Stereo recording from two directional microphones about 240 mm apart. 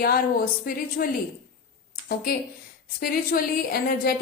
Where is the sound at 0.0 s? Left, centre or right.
Left.